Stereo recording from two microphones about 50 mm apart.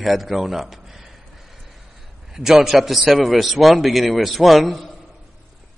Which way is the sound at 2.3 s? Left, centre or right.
Centre.